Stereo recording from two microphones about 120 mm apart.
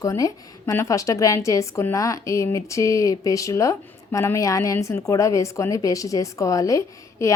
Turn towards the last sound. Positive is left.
turn(degrees=25)  # may be behind; listen again after turning